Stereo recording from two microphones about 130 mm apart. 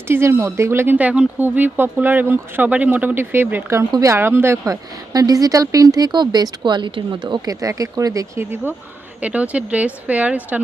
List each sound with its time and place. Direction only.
0.1 s speech: 20° right (ahead or behind)